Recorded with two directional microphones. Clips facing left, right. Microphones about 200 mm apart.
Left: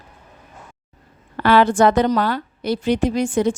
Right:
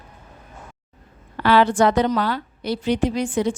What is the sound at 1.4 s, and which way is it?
A woman's voice, 50° left (ahead or behind).